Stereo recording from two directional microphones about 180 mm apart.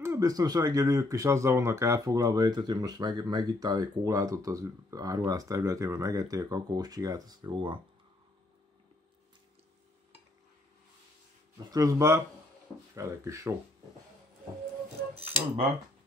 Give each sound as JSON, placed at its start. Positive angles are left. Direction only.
{"t": 0.0, "sound": "speech", "side_deg": -15}
{"t": 11.7, "sound": "speech", "side_deg": -15}
{"t": 15.1, "sound": "speech", "side_deg": -35}